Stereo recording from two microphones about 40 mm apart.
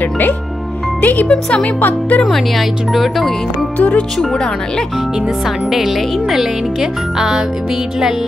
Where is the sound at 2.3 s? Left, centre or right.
Centre.